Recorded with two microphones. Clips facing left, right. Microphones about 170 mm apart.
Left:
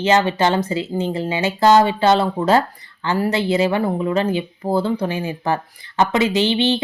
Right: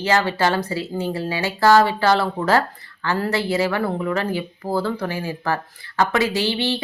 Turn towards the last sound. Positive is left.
turn(degrees=20)  # may be behind; listen again after turning